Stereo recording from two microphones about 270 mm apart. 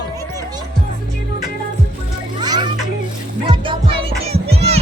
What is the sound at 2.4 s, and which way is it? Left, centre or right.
Children playing, centre.